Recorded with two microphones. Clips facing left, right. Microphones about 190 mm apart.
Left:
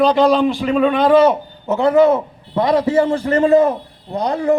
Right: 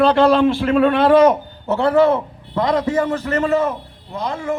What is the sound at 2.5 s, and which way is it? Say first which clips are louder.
A man's voice: left 3 dB; 25° left (ahead or behind).